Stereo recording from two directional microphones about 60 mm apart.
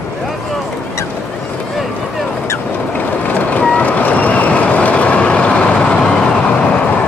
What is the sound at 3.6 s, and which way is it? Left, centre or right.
Vehicle, left.